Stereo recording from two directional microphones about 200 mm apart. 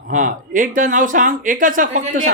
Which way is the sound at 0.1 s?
40° right (ahead or behind).